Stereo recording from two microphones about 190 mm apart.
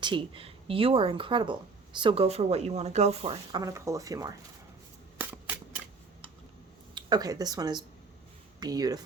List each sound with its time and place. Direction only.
0.0 s speech: 25° right (ahead or behind)
3.6 s speech: 15° right (ahead or behind)
6.9 s speech: 20° right (ahead or behind)